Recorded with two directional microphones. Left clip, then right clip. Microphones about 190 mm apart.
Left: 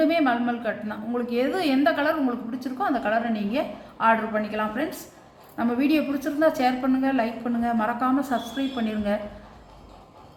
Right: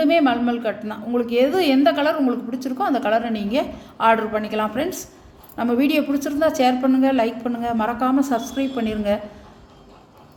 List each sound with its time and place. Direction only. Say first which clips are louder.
0.0 s a woman's voice: right 4 dB; 40° right (ahead or behind)